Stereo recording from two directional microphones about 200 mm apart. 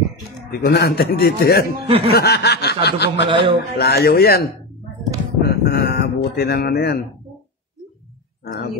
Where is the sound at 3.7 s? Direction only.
55° left (ahead or behind).